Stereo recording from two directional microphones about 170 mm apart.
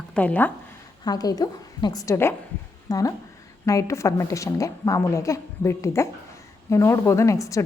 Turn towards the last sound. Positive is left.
turn(degrees=20)  # may be behind; listen again after turning